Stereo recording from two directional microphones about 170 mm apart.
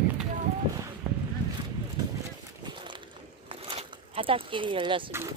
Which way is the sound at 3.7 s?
30° right (ahead or behind).